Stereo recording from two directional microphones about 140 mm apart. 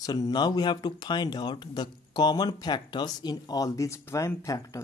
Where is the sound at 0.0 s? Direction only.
25° left (ahead or behind).